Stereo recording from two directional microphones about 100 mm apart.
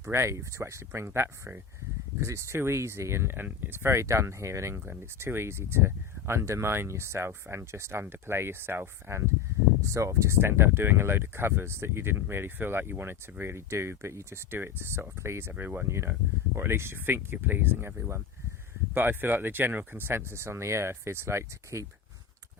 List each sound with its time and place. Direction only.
0.0 s speech: 25° right (ahead or behind)